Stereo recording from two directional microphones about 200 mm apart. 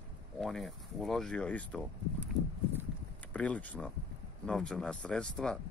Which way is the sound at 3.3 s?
5° left (ahead or behind).